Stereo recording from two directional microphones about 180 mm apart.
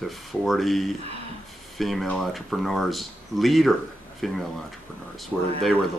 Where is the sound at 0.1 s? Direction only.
Centre (ahead or behind).